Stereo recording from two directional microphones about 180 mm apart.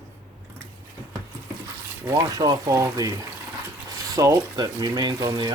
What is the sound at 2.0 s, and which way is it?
Speech, 15° right (ahead or behind).